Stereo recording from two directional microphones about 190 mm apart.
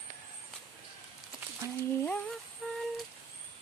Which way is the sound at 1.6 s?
15° right (ahead or behind).